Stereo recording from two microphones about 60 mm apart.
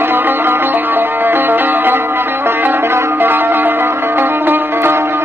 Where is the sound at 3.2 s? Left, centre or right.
Right.